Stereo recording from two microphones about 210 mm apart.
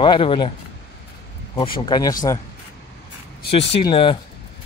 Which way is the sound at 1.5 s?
25° left (ahead or behind).